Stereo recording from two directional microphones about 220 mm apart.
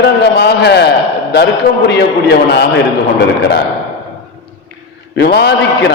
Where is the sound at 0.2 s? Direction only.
50° left (ahead or behind).